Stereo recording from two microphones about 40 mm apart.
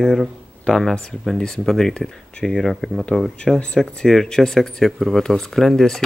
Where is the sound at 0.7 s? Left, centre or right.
Left; by 3.6 s centre.